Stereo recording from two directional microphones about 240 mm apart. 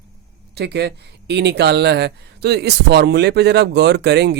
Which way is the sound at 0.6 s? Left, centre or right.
Right.